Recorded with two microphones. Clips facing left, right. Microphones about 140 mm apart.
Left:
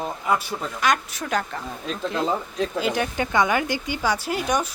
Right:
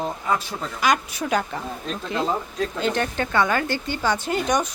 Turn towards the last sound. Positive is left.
turn(degrees=5)  # may be behind; listen again after turning